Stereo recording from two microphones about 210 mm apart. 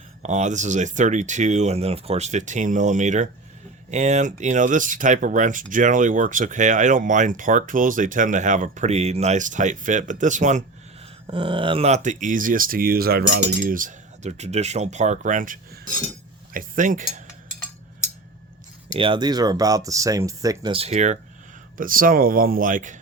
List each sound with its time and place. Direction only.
0.2 s speech: 35° right (ahead or behind)
11.3 s speech: 25° right (ahead or behind); by 13.4 s 50° right (ahead or behind)
13.7 s speech: 40° right (ahead or behind)
16.5 s cutlery: 40° right (ahead or behind)
18.9 s speech: 25° right (ahead or behind)